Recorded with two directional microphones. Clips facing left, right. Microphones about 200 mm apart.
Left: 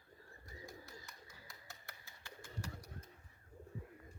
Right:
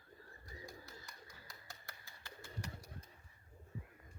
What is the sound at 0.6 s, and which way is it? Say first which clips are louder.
Bird: left 2 dB; centre (ahead or behind).